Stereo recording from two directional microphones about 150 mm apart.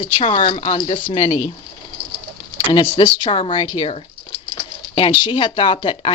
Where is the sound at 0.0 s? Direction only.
35° left (ahead or behind).